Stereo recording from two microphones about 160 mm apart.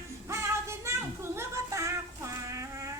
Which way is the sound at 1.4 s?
20° right (ahead or behind).